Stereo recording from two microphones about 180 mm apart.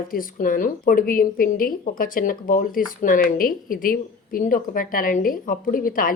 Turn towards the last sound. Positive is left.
turn(degrees=50)  # may be behind; listen again after turning